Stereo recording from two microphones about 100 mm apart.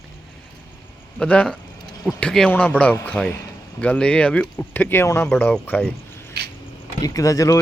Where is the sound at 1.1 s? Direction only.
10° left (ahead or behind).